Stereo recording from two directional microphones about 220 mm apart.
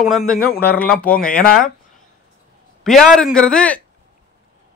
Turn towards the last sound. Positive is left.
turn(degrees=5)  # may be behind; listen again after turning